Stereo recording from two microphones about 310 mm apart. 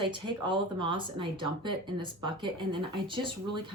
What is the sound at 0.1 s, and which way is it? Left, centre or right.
Speech, centre.